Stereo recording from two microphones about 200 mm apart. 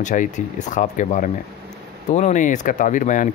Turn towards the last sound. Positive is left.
turn(degrees=40)  # may be behind; listen again after turning